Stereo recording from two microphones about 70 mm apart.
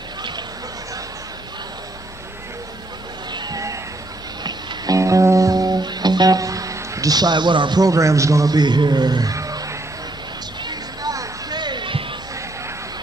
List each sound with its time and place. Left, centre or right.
3.3 s a sound: right
4.4 s music: right
4.9 s music: right
7.9 s a man's voice: right
8.5 s a man's voice: right
9.3 s music: right
10.6 s a sound: right